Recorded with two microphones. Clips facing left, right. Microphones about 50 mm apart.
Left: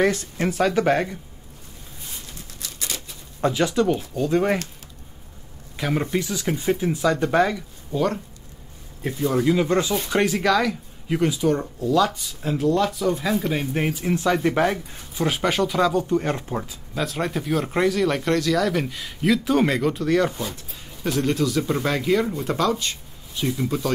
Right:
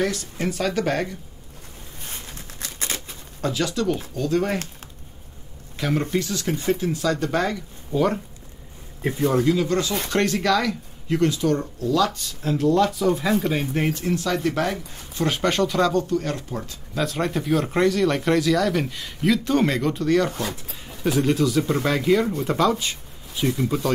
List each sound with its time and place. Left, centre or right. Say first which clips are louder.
0.0 s speech: left 3 dB; left
2.0 s a sound: right 2 dB; right
3.3 s speech: left 4 dB; left
5.8 s speech: even; centre
7.9 s speech: right 2 dB; centre
9.4 s speech: left 1 dB; left
10.0 s speech: left 1 dB; centre
14.1 s speech: left 6 dB; left
15.1 s speech: even; centre
16.1 s speech: left 2 dB; left
16.6 s speech: right 1 dB; centre